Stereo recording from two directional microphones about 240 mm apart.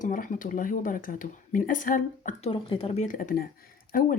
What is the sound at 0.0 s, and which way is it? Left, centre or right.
Speech, left.